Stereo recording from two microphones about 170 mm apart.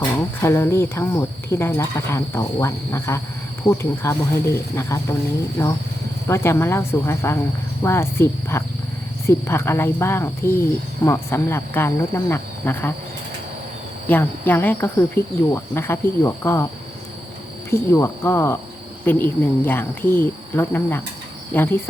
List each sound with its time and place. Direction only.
0.2 s speech: 15° left (ahead or behind)
6.2 s speech: 15° left (ahead or behind)
14.1 s speech: 10° left (ahead or behind)
17.7 s speech: 15° left (ahead or behind)